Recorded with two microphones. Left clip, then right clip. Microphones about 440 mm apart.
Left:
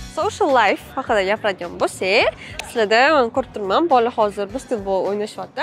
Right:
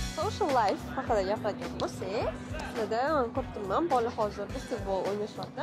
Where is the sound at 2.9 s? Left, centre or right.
Left.